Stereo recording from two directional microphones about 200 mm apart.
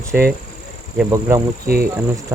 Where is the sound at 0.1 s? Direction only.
5° right (ahead or behind).